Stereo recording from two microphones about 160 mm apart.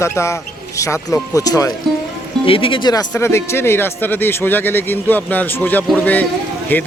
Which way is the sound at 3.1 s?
15° left (ahead or behind).